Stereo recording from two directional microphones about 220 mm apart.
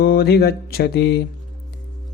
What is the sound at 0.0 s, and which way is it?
Speech, 45° left (ahead or behind).